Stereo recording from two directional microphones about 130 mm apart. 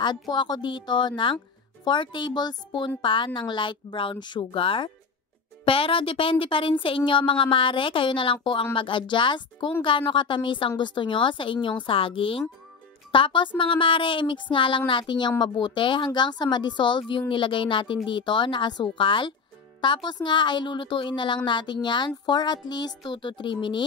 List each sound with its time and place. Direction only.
0.3 s a woman's voice: 35° left (ahead or behind)